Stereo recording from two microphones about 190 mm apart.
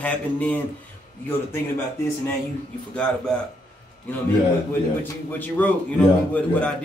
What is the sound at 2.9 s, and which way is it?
Speech, 5° left (ahead or behind).